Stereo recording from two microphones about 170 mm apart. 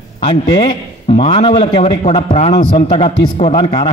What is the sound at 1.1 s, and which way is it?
A man's voice, 35° left (ahead or behind).